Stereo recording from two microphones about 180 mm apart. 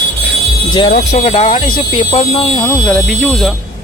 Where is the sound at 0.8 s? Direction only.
45° left (ahead or behind); by 2.6 s 25° left (ahead or behind).